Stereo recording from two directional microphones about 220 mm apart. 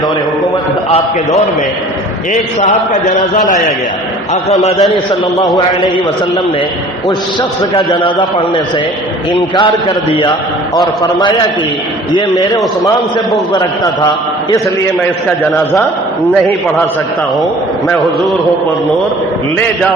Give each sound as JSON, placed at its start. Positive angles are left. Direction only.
{"t": 0.9, "sound": "a man's voice", "side_deg": 30}
{"t": 2.6, "sound": "a man's voice", "side_deg": 35}
{"t": 10.1, "sound": "a man's voice", "side_deg": 20}